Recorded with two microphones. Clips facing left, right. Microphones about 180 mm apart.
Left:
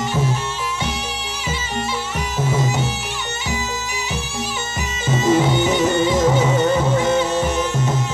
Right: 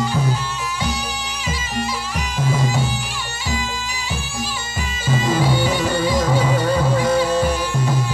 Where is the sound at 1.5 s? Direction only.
25° left (ahead or behind).